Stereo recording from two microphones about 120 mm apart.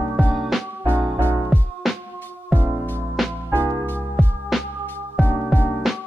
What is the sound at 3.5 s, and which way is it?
Music, 20° right (ahead or behind).